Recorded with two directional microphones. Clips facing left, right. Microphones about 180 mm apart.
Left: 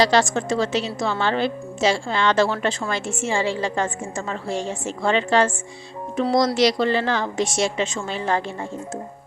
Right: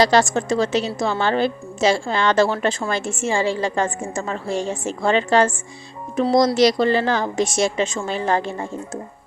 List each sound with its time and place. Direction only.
0.0 s a woman's voice: 45° right (ahead or behind)